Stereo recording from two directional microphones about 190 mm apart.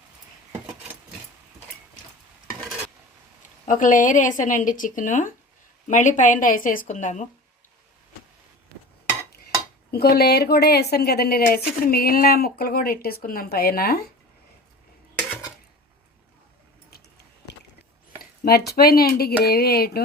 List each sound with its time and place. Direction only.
3.7 s a woman's voice: 45° left (ahead or behind)
9.9 s a woman's voice: 55° left (ahead or behind)
18.2 s speech: 55° left (ahead or behind)